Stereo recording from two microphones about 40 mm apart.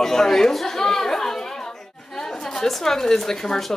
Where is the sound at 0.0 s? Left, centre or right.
Centre.